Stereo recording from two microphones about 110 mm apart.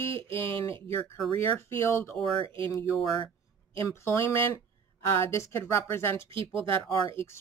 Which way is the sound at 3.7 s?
25° left (ahead or behind).